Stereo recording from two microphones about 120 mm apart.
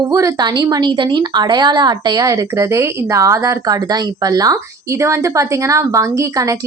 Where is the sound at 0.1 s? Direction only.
30° right (ahead or behind).